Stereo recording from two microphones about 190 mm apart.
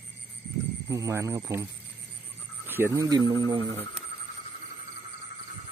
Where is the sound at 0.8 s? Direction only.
15° right (ahead or behind).